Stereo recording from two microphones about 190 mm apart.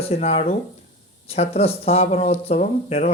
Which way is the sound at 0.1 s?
35° left (ahead or behind).